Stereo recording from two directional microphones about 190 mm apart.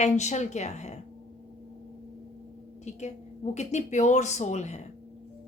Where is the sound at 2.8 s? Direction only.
35° left (ahead or behind).